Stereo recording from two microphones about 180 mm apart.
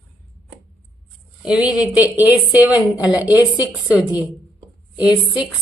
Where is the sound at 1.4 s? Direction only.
5° right (ahead or behind).